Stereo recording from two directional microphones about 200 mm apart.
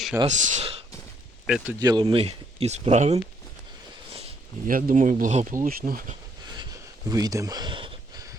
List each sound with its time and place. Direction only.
0.3 s speech: 40° right (ahead or behind)
1.5 s speech: 5° right (ahead or behind)
1.8 s speech: 20° right (ahead or behind)
4.6 s speech: 45° right (ahead or behind)
7.1 s a sound: 15° right (ahead or behind)